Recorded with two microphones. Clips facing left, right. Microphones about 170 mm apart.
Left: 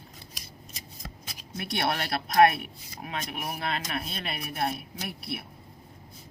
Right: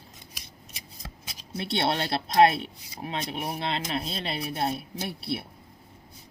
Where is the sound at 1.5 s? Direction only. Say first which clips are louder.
Right 3 dB; 25° right (ahead or behind).